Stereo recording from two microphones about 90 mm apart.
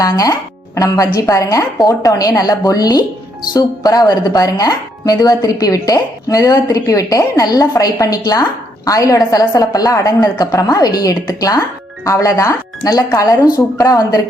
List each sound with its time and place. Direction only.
0.0 s a woman's voice: 40° left (ahead or behind)